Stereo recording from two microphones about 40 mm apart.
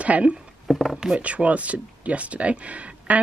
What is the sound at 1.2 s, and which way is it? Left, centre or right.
Speech, right.